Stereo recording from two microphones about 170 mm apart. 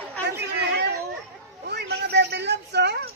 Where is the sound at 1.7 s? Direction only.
80° right.